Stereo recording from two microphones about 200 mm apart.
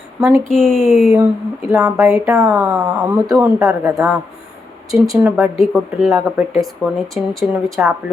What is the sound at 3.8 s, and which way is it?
A woman's voice, 15° right (ahead or behind).